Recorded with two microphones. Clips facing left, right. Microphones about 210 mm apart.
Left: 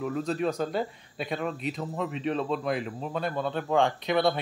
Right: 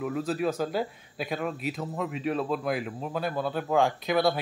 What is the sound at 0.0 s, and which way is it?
Speech, 5° right (ahead or behind).